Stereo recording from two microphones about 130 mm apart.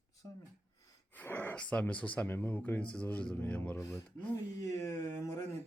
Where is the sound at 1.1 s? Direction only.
15° left (ahead or behind).